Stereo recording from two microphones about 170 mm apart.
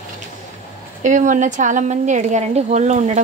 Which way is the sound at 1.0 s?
45° right (ahead or behind).